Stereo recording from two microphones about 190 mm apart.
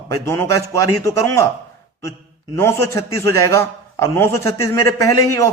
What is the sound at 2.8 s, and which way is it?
A man's voice, 15° left (ahead or behind).